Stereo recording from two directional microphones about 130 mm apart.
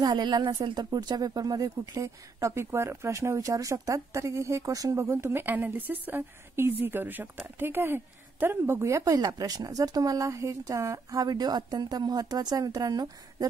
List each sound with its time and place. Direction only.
0.0 s speech: 35° right (ahead or behind)